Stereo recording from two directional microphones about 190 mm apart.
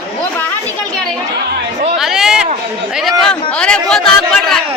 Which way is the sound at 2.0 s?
Centre (ahead or behind).